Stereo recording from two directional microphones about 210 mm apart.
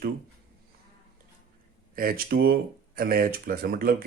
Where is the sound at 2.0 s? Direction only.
45° right (ahead or behind).